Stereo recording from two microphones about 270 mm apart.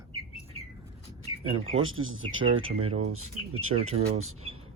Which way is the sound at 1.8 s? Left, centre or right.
Right.